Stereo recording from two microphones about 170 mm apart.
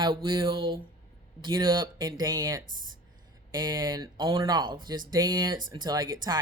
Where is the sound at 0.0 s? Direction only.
30° right (ahead or behind).